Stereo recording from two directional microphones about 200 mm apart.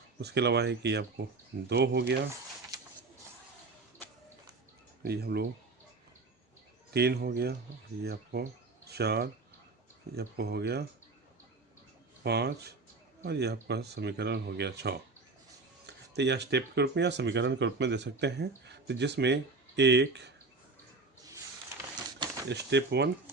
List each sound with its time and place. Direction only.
0.2 s speech: 55° right (ahead or behind)
5.0 s speech: 50° right (ahead or behind)
6.9 s speech: 55° right (ahead or behind)
12.2 s speech: 55° right (ahead or behind)
22.4 s speech: 60° right (ahead or behind)